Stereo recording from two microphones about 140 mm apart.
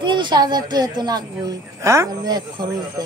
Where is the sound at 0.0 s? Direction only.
35° right (ahead or behind).